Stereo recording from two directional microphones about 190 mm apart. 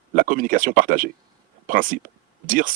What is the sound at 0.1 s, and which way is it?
Speech, 45° right (ahead or behind).